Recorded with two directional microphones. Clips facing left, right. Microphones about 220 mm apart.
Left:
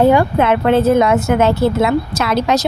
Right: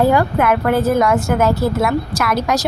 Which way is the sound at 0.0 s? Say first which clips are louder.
Left 3 dB; 25° left (ahead or behind).